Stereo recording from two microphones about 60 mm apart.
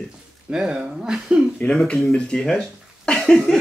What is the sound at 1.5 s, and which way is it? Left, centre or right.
Speech, centre.